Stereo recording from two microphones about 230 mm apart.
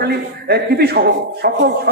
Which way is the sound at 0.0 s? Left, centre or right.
Right.